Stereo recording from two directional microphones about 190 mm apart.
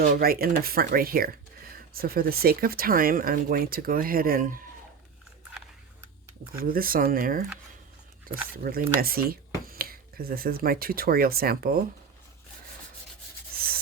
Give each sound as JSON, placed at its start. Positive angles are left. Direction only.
{"t": 0.0, "sound": "speech", "side_deg": -50}
{"t": 6.6, "sound": "speech", "side_deg": -50}
{"t": 8.5, "sound": "speech", "side_deg": -50}